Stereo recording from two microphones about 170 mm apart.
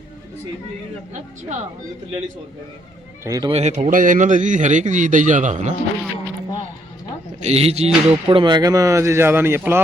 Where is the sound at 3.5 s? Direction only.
40° right (ahead or behind).